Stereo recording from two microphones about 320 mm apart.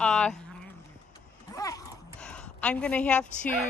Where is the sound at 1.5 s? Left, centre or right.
Centre.